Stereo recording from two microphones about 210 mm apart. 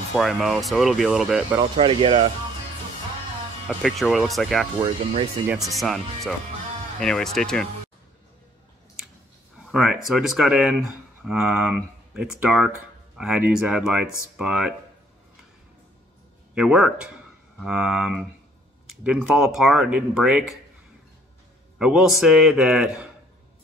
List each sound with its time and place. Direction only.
0.1 s speech: centre (ahead or behind)
1.6 s speech: 25° right (ahead or behind)
3.6 s speech: centre (ahead or behind)
4.8 s speech: 30° right (ahead or behind)
5.7 s speech: centre (ahead or behind)
9.7 s speech: centre (ahead or behind)
16.5 s speech: centre (ahead or behind)
21.7 s speech: 5° right (ahead or behind)